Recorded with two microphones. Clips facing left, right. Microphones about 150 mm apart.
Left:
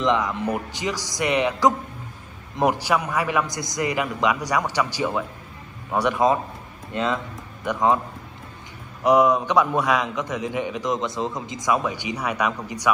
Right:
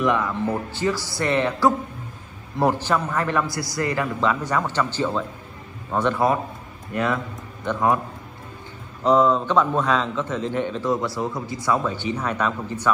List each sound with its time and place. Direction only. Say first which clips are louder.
0.0 s a man's voice: even; 20° left (ahead or behind)
9.0 s a man's voice: even; 15° left (ahead or behind)